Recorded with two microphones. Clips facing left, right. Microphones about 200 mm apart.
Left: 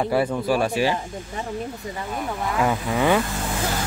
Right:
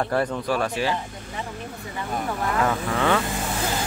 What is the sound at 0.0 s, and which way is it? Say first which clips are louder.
Speech: left 2 dB; 10° left (ahead or behind).